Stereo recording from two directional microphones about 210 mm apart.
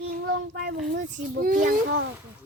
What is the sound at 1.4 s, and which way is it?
Speech, 40° right (ahead or behind).